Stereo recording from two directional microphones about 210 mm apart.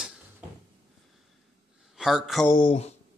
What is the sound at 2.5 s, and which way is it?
Speech, 25° left (ahead or behind).